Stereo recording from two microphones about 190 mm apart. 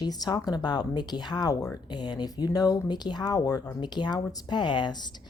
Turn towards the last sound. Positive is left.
turn(degrees=25)  # may be behind; listen again after turning